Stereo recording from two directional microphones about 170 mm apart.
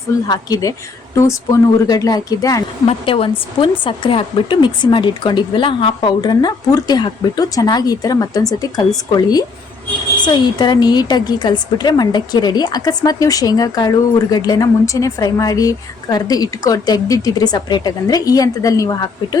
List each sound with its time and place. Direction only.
0.3 s a woman's voice: 20° left (ahead or behind)
2.8 s a woman's voice: 30° left (ahead or behind)
10.2 s a woman's voice: 25° left (ahead or behind)